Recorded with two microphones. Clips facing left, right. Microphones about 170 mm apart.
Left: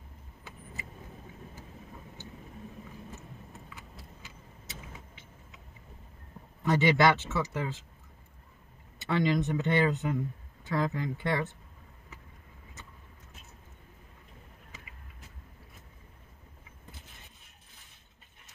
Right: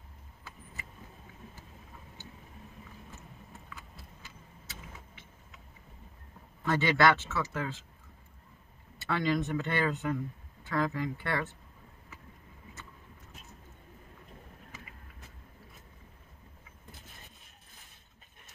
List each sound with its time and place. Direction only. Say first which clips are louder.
6.6 s speech: left 2 dB; 15° left (ahead or behind)
9.0 s speech: left 2 dB; 20° left (ahead or behind)